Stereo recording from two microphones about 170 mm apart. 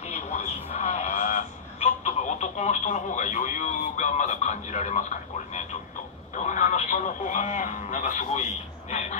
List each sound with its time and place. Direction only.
0.0 s radio: 40° left (ahead or behind)
6.3 s radio: 45° left (ahead or behind)